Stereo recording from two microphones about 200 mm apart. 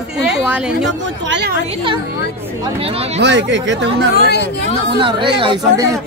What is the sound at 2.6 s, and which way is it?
Speech, 30° right (ahead or behind).